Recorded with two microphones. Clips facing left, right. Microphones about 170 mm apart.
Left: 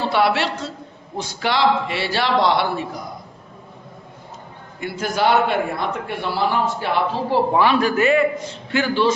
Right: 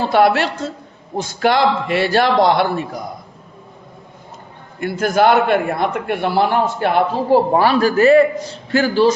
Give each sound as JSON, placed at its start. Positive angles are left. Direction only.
{"t": 0.1, "sound": "a man's voice", "side_deg": -45}
{"t": 4.8, "sound": "a man's voice", "side_deg": -50}